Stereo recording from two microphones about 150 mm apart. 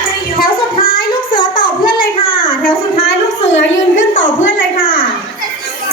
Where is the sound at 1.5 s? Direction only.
75° left (ahead or behind).